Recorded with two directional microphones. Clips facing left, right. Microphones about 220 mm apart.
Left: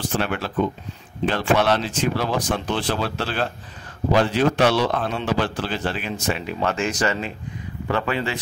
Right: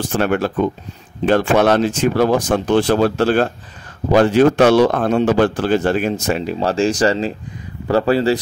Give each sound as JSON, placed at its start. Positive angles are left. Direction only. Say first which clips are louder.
{"t": 0.1, "sound": "a man's voice", "louder": "right 9 dB", "side_deg": -45}